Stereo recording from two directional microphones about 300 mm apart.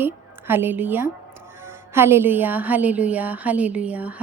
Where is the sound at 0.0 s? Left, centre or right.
Centre.